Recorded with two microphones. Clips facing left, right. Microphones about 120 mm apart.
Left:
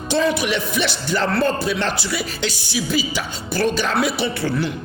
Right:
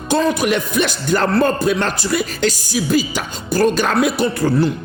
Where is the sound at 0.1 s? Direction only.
45° right (ahead or behind).